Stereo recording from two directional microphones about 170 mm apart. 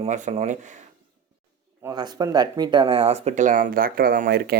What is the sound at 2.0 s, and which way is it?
Speech, 20° right (ahead or behind).